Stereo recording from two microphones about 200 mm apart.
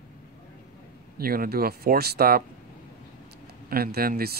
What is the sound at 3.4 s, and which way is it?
Speech, 50° right (ahead or behind).